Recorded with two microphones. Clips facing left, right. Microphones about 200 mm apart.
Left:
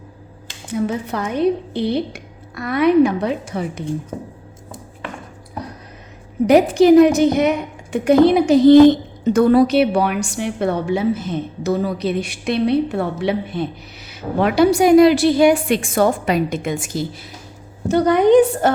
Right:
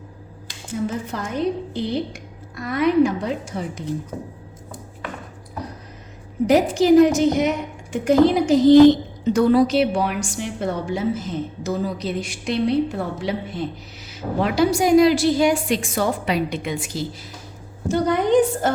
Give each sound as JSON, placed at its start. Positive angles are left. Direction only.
{"t": 0.7, "sound": "a woman's voice", "side_deg": 65}
{"t": 6.5, "sound": "a woman's voice", "side_deg": 65}
{"t": 17.8, "sound": "a woman's voice", "side_deg": 65}